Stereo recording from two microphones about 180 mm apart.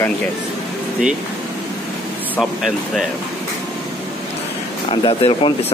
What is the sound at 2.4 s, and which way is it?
Speech, centre (ahead or behind).